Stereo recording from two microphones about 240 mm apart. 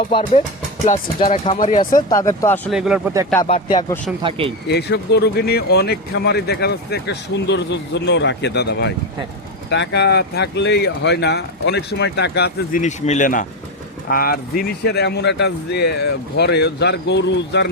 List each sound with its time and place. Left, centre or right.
0.1 s speech: left
1.8 s speech: centre
2.6 s speech: centre
3.4 s speech: left
4.2 s speech: right
4.7 s speech: left
12.8 s speech: left